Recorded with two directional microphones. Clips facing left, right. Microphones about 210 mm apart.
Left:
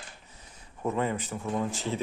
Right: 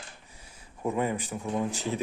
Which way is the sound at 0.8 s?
15° right (ahead or behind).